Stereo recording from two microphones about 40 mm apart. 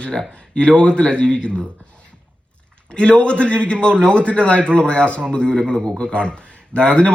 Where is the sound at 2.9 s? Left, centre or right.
Left.